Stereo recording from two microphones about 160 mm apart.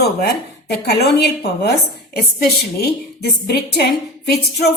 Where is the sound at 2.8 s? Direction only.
75° left (ahead or behind).